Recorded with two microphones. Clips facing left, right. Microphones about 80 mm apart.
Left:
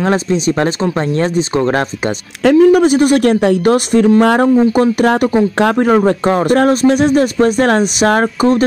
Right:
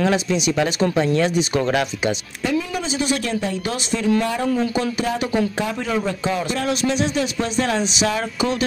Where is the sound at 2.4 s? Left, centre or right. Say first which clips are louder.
Left 16 dB; left.